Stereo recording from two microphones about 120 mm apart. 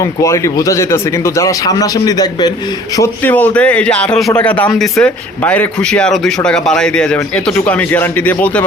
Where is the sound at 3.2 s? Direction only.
15° left (ahead or behind).